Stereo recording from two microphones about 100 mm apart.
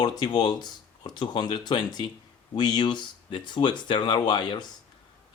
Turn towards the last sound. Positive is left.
turn(degrees=45)  # may be behind; listen again after turning